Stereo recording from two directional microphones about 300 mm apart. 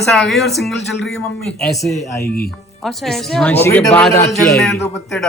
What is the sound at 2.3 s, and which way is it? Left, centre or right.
Speech, left.